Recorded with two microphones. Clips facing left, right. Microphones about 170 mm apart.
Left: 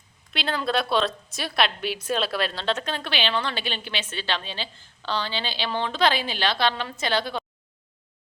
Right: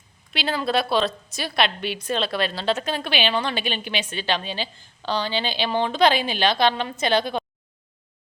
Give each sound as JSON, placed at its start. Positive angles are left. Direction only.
{"t": 0.3, "sound": "a woman's voice", "side_deg": -5}